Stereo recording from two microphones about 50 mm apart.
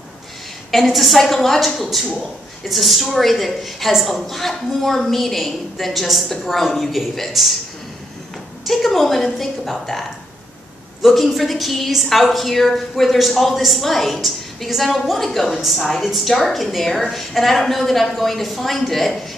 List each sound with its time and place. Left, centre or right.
0.7 s a woman's voice: centre
8.6 s a woman's voice: centre